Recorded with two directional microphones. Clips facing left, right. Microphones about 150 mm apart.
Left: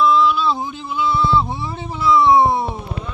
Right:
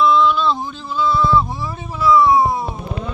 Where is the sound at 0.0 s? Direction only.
5° left (ahead or behind); by 2.6 s 25° left (ahead or behind).